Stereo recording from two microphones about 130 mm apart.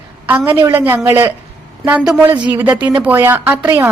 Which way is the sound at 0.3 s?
15° right (ahead or behind).